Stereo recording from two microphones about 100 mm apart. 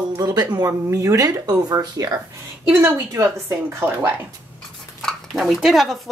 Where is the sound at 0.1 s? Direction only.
40° right (ahead or behind).